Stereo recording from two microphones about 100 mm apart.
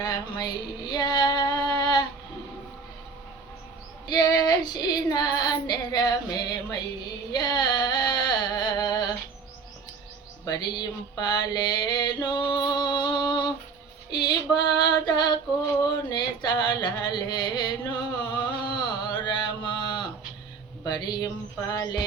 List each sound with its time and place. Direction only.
0.0 s female singing: 45° left (ahead or behind)
4.1 s female singing: 45° left (ahead or behind)
7.3 s a sound: 45° left (ahead or behind)
10.4 s music: 45° left (ahead or behind)
14.1 s female singing: 45° left (ahead or behind)
16.0 s a sound: 45° left (ahead or behind)
18.7 s mantra: 50° left (ahead or behind)
20.8 s a sound: 40° left (ahead or behind)
21.7 s music: 40° left (ahead or behind)